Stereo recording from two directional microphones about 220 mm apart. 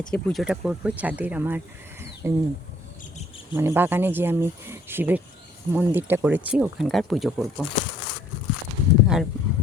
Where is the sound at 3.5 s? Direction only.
10° right (ahead or behind).